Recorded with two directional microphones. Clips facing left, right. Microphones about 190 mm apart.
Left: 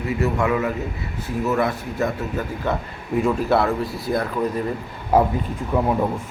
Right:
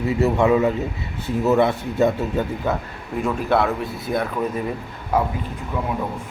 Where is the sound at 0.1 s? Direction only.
25° right (ahead or behind).